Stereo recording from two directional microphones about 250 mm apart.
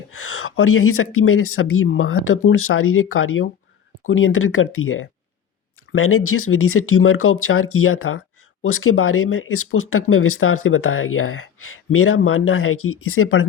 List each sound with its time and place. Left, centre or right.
0.3 s speech: left